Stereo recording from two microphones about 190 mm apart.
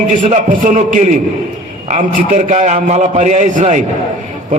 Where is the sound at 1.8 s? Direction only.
40° right (ahead or behind).